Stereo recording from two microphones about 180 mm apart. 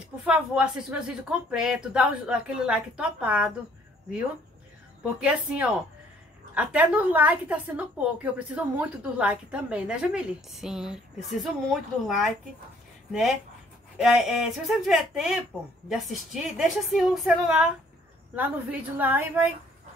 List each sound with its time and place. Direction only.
0.2 s a woman's voice: 5° right (ahead or behind)
5.2 s a woman's voice: 5° right (ahead or behind)
13.1 s a woman's voice: centre (ahead or behind)